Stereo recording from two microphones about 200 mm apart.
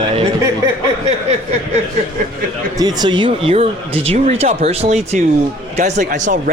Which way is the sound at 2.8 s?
20° right (ahead or behind).